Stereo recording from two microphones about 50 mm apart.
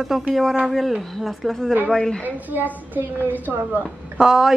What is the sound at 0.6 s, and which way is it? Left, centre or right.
Speech, centre.